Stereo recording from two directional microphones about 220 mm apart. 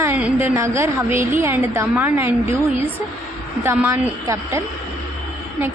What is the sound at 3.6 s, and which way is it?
A woman's voice, 10° right (ahead or behind).